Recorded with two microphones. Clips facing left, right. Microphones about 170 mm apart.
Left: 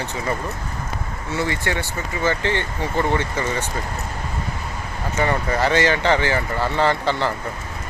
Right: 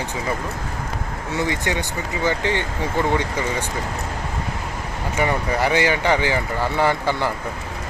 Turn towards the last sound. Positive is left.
turn(degrees=-10)  # may be behind; listen again after turning